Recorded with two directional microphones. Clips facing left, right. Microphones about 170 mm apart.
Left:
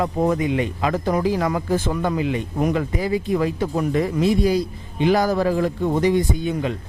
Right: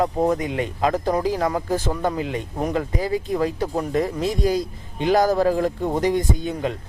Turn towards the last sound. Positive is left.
turn(degrees=-45)  # may be behind; listen again after turning